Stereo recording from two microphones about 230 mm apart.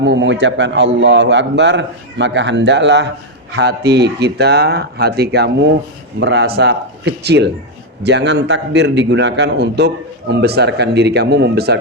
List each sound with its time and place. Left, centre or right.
0.0 s a man's voice: right